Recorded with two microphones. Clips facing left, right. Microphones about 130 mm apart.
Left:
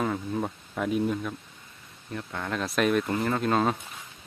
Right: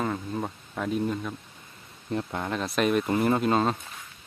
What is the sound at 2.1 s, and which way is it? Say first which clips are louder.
Speech: right 4 dB; 25° right (ahead or behind).